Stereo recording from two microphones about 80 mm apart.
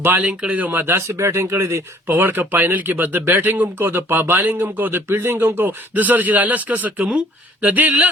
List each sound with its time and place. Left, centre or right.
0.0 s speech: right